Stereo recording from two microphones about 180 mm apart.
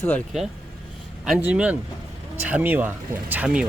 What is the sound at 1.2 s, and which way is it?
Speech, 5° right (ahead or behind).